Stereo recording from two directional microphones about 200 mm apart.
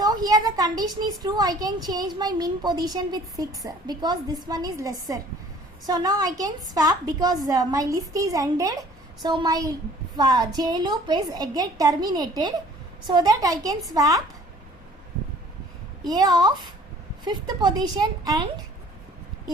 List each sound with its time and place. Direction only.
0.0 s a woman's voice: 20° right (ahead or behind)
16.0 s speech: 20° right (ahead or behind)